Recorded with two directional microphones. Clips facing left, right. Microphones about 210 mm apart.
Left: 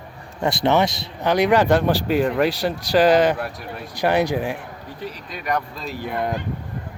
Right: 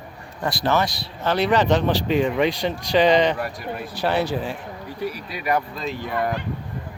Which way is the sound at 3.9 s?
15° left (ahead or behind).